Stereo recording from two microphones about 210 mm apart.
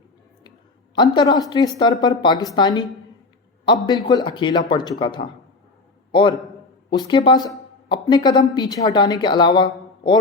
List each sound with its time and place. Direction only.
0.9 s a man's voice: 20° left (ahead or behind)